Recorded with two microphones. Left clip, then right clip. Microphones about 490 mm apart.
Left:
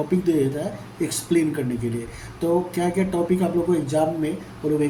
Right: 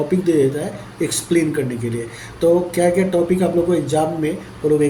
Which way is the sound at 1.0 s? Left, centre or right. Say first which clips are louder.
Right 4 dB; left.